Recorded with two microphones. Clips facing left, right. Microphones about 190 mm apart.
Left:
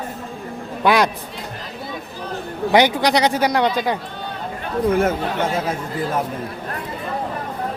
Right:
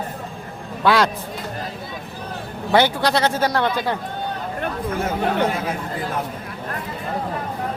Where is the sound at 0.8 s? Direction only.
15° left (ahead or behind).